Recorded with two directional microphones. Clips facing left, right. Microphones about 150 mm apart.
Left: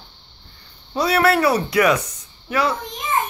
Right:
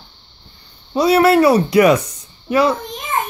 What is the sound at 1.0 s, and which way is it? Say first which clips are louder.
A child's voice: right 6 dB; 20° right (ahead or behind).